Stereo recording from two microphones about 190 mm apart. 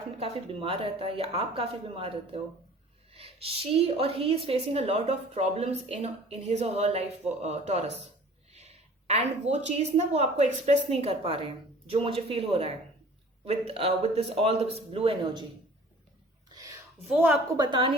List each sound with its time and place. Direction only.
0.2 s a woman's voice: 30° right (ahead or behind)
17.1 s a woman's voice: 10° right (ahead or behind)
17.6 s speech: 25° right (ahead or behind)